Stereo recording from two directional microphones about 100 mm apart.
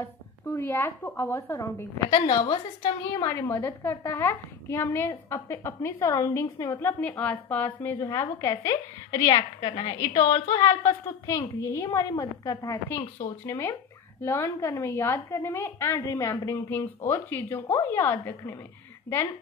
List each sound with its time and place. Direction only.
0.0 s a woman's voice: 25° left (ahead or behind)
2.0 s a woman's voice: 50° left (ahead or behind)
3.3 s a woman's voice: 25° left (ahead or behind)
6.9 s a woman's voice: 15° left (ahead or behind); by 9.3 s 35° left (ahead or behind)
9.3 s a woman's voice: 55° left (ahead or behind)
10.2 s a woman's voice: 35° left (ahead or behind)